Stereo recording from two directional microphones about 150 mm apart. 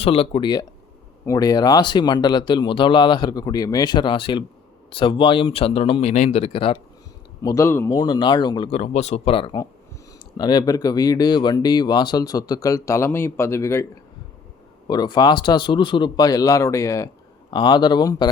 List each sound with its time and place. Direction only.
0.0 s speech: 40° left (ahead or behind)
1.2 s speech: 25° left (ahead or behind)
7.4 s speech: 20° left (ahead or behind)
14.8 s speech: 30° left (ahead or behind)